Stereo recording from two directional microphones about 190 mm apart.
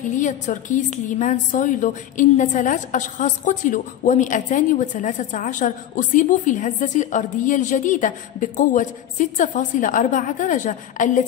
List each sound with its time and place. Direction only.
0.1 s a woman's voice: 40° left (ahead or behind)